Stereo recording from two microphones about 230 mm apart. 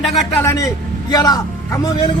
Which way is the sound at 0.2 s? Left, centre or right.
Centre.